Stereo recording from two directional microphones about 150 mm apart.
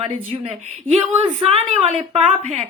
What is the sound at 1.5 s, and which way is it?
Speech, 40° right (ahead or behind).